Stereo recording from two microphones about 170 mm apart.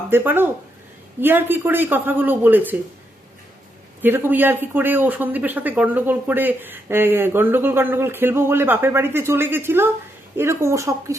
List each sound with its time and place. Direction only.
0.1 s speech: 15° right (ahead or behind)
4.0 s speech: 10° right (ahead or behind)